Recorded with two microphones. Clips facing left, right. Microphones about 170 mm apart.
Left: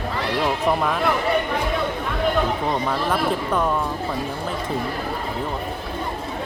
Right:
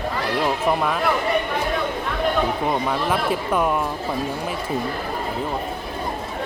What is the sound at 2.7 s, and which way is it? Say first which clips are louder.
Speech: right 1 dB; 5° right (ahead or behind).